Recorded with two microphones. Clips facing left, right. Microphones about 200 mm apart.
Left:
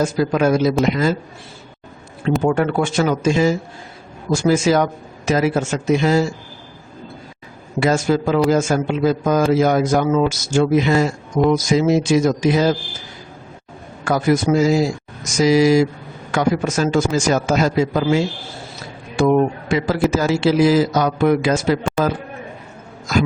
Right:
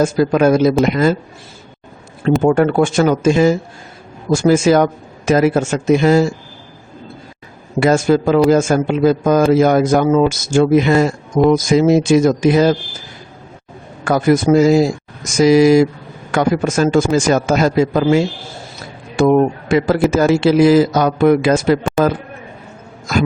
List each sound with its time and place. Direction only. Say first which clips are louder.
0.0 s a man's voice: right 4 dB; 50° right (ahead or behind)
2.4 s a man's voice: right 5 dB; 50° right (ahead or behind)
7.8 s a man's voice: right 4 dB; 55° right (ahead or behind)
14.0 s a man's voice: right 4 dB; 55° right (ahead or behind)
19.2 s a man's voice: right 3 dB; 55° right (ahead or behind)